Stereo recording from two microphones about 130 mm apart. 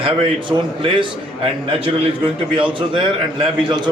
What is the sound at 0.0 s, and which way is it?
A man's voice, 40° right (ahead or behind).